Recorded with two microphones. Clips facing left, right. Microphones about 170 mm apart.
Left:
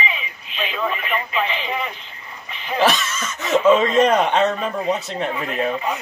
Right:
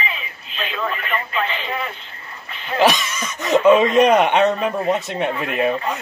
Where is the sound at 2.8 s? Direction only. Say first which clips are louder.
Right 2 dB; 15° right (ahead or behind).